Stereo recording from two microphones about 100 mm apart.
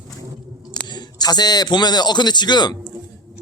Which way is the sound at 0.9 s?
45° left (ahead or behind).